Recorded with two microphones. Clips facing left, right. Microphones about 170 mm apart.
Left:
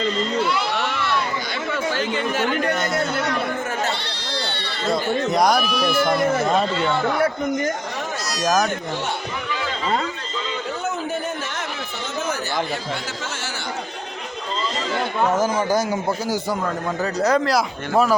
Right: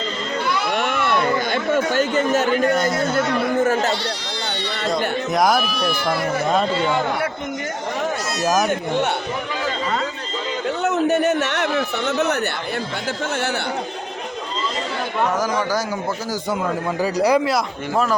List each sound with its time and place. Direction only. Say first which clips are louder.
0.8 s chatter: right 4 dB; 50° right (ahead or behind)
5.3 s speech: right 1 dB; centre (ahead or behind)
8.4 s speech: even; 10° right (ahead or behind)
10.8 s a sound: right 10 dB; 70° right (ahead or behind)
15.4 s a man's voice: left 1 dB; 25° left (ahead or behind)
17.0 s speech: right 2 dB; 10° right (ahead or behind)